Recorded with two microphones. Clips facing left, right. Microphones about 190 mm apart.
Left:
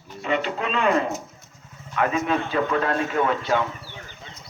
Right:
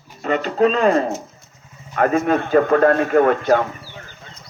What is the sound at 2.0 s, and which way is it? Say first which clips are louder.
A man's voice: right 6 dB; 50° right (ahead or behind).